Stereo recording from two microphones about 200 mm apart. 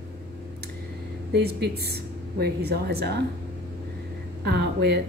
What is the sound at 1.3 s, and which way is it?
A woman's voice, 55° right (ahead or behind).